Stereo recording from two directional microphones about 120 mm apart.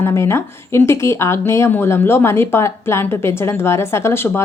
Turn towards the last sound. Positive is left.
turn(degrees=20)  # may be behind; listen again after turning